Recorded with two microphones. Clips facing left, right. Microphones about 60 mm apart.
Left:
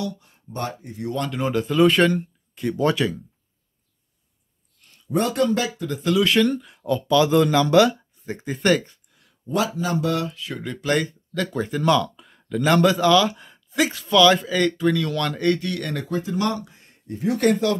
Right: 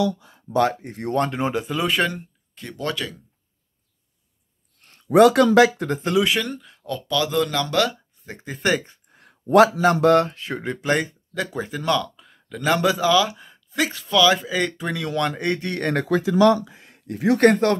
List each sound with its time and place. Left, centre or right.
0.6 s speech: right
1.1 s speech: right
1.5 s speech: centre
2.5 s speech: centre
2.8 s speech: centre
4.8 s a sound: right
5.1 s speech: right
6.2 s speech: centre
6.9 s speech: centre
9.5 s speech: right
16.1 s speech: right
16.9 s a sound: right
17.4 s speech: right